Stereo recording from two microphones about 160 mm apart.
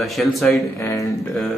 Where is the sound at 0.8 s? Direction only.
15° left (ahead or behind).